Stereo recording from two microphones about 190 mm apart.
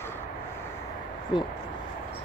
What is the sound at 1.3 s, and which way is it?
Speech, 25° left (ahead or behind).